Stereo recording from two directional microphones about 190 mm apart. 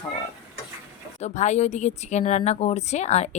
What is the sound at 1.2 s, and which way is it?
A woman's voice, 40° left (ahead or behind).